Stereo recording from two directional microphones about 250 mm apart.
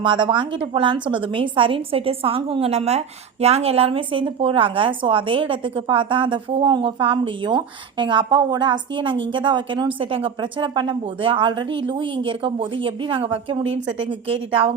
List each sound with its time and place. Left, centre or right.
0.0 s a woman's voice: centre